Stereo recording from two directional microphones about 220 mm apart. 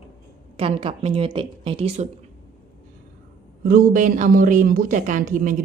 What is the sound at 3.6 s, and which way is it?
Speech, 40° right (ahead or behind).